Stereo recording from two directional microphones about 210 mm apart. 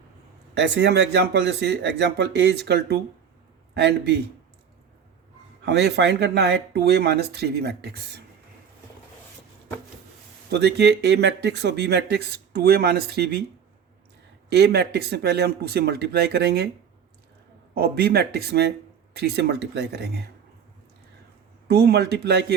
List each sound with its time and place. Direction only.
0.5 s speech: 55° right (ahead or behind)
5.6 s speech: 55° right (ahead or behind)
10.5 s speech: 55° right (ahead or behind)
14.5 s speech: 50° right (ahead or behind)
17.7 s speech: 50° right (ahead or behind)
21.7 s speech: 50° right (ahead or behind)